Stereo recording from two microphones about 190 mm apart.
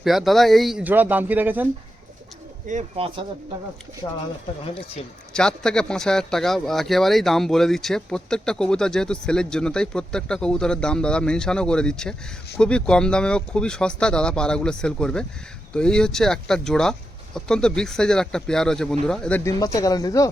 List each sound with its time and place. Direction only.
0.0 s speech: centre (ahead or behind)
2.6 s speech: 35° right (ahead or behind)
4.0 s speech: 15° left (ahead or behind)
5.3 s speech: 5° left (ahead or behind)
19.5 s speech: 20° left (ahead or behind)